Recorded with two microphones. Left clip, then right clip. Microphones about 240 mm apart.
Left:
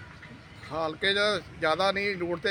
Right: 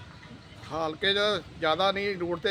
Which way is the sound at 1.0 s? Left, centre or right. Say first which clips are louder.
Even; centre.